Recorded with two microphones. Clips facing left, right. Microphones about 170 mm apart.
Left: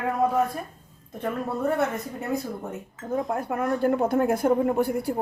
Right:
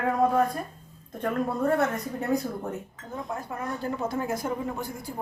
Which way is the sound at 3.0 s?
50° left (ahead or behind).